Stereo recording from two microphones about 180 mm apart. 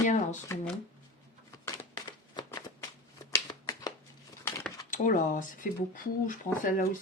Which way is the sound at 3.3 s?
20° left (ahead or behind).